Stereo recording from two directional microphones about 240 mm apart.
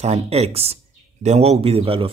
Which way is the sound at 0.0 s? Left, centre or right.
Right.